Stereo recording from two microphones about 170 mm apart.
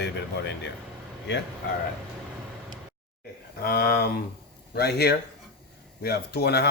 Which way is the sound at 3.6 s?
65° left (ahead or behind).